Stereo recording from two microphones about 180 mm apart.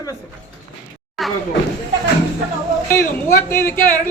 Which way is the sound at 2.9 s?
15° left (ahead or behind).